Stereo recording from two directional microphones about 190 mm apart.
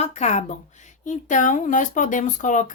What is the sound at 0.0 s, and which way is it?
Speech, 35° left (ahead or behind).